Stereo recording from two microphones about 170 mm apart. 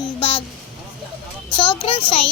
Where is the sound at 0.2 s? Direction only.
30° left (ahead or behind).